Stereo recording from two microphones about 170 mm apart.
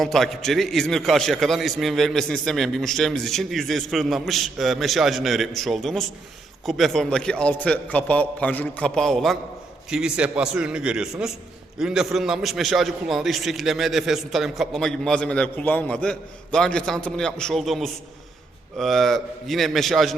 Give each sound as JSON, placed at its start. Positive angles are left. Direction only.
{"t": 0.0, "sound": "a man's voice", "side_deg": 0}